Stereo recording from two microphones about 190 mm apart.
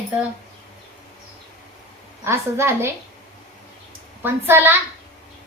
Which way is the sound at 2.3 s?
15° right (ahead or behind).